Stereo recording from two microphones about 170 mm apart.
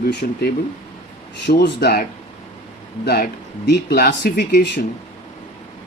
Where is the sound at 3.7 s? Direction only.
70° left (ahead or behind).